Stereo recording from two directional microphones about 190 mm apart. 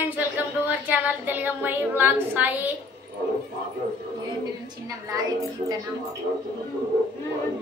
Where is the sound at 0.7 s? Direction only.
10° right (ahead or behind).